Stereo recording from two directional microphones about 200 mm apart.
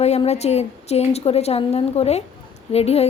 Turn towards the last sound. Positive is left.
turn(degrees=30)  # may be behind; listen again after turning